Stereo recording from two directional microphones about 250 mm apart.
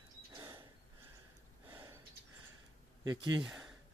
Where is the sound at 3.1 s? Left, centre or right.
Centre.